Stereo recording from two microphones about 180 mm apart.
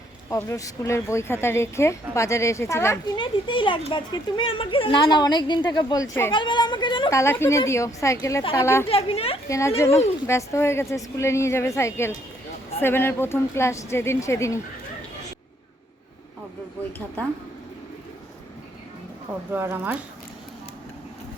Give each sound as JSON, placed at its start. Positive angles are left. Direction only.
{"t": 0.3, "sound": "speech", "side_deg": 15}
{"t": 3.2, "sound": "speech", "side_deg": 25}
{"t": 8.9, "sound": "a woman's voice", "side_deg": 35}
{"t": 9.5, "sound": "speech", "side_deg": 15}
{"t": 19.5, "sound": "speech", "side_deg": -10}